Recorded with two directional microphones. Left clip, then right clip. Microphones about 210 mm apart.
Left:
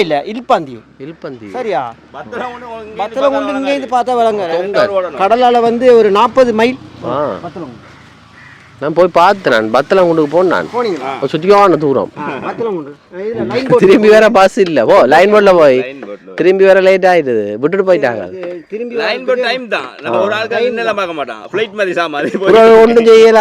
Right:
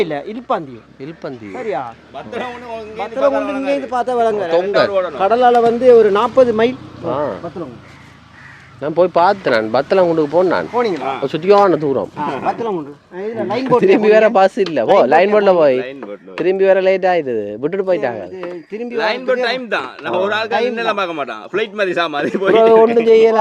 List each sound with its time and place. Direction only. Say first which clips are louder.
0.0 s a man's voice: left 6 dB; 50° left (ahead or behind)
2.1 s a man's voice: left 1 dB; 35° left (ahead or behind)
3.3 s a man's voice: left 3 dB; 35° left (ahead or behind); by 6.7 s 55° left (ahead or behind)
7.1 s speech: left 3 dB; 20° left (ahead or behind)
8.8 s speech: left 4 dB; 25° left (ahead or behind)
12.5 s speech: left 2 dB; 10° right (ahead or behind)
13.8 s a man's voice: left 5 dB; 30° left (ahead or behind)
22.6 s a man's voice: left 5 dB; 40° left (ahead or behind)